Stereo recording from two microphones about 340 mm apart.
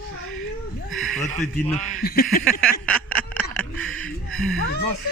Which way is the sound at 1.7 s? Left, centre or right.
Left.